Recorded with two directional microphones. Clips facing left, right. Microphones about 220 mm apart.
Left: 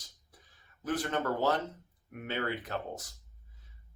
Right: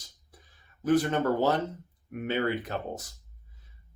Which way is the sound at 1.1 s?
10° right (ahead or behind).